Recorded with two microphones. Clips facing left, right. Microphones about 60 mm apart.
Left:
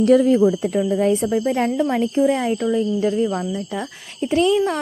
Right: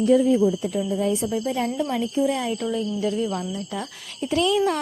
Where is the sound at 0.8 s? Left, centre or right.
Left.